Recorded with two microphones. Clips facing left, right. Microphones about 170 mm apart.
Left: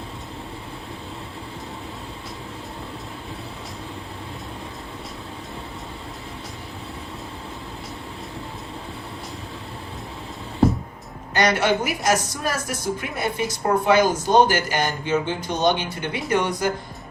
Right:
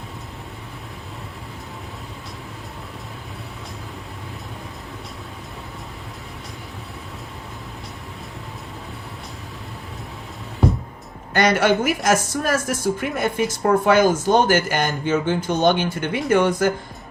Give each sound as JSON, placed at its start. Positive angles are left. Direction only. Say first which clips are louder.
{"t": 11.3, "sound": "a man's voice", "louder": "right 3 dB", "side_deg": -50}